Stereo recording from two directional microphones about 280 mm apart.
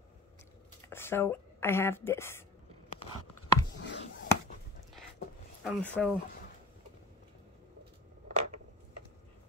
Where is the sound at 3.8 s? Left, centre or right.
Left.